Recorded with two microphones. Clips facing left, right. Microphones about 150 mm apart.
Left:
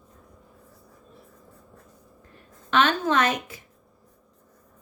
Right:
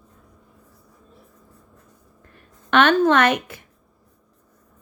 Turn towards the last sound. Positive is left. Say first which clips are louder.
# right 5 dB
turn(degrees=-65)  # may be behind; listen again after turning